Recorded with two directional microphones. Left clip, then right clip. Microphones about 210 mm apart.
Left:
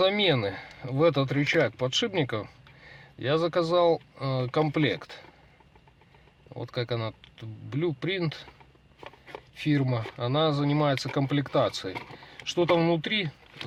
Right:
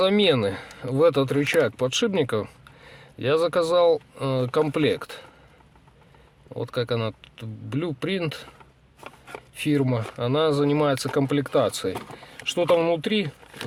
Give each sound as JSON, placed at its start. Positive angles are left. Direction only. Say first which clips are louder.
{"t": 0.0, "sound": "speech", "louder": "right 4 dB", "side_deg": -60}
{"t": 6.6, "sound": "speech", "louder": "right 6 dB", "side_deg": -60}
{"t": 9.6, "sound": "speech", "louder": "right 4 dB", "side_deg": -60}